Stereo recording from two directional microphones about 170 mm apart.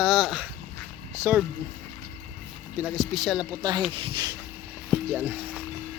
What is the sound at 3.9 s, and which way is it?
Speech, 30° right (ahead or behind).